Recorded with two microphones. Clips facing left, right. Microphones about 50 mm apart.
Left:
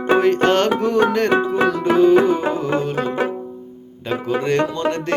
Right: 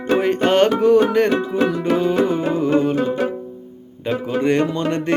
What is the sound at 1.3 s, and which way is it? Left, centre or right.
Music, left.